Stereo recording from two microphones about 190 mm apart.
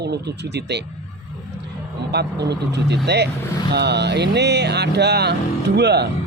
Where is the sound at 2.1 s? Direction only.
60° right (ahead or behind).